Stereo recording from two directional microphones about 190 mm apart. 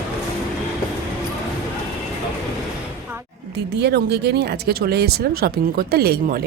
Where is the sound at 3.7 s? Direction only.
60° right (ahead or behind).